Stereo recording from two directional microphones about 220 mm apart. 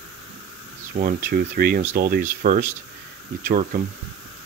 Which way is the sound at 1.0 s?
35° right (ahead or behind).